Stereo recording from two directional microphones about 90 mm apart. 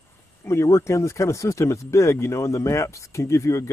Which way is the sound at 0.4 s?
30° left (ahead or behind).